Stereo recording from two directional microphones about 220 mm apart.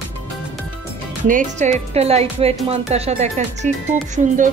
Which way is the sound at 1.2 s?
35° right (ahead or behind).